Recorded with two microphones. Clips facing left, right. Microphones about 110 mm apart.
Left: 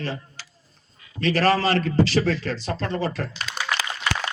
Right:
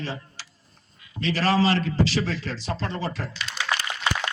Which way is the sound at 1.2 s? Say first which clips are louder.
Left 2 dB; 55° left (ahead or behind).